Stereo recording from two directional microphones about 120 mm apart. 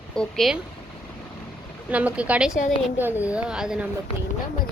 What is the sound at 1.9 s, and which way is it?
A woman's voice, 10° right (ahead or behind).